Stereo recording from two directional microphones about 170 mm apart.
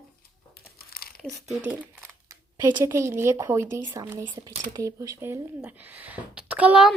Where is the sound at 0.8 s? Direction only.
65° left (ahead or behind).